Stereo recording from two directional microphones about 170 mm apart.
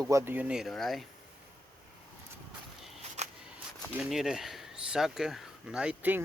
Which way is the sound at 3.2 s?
40° right (ahead or behind).